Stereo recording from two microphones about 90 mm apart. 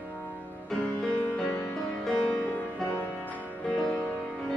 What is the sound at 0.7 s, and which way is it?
Music, 5° left (ahead or behind).